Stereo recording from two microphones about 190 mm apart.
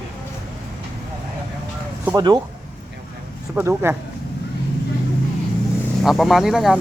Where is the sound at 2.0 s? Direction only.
20° right (ahead or behind).